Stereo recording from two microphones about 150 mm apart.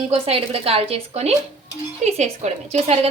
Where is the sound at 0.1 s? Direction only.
45° right (ahead or behind).